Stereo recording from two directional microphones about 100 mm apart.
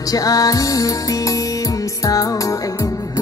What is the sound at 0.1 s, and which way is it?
Music, 35° left (ahead or behind).